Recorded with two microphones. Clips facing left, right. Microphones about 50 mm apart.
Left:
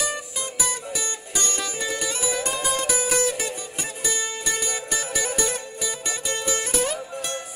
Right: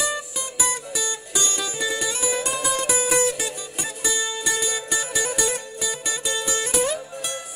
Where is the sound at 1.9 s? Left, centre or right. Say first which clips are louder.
Right 1 dB; right.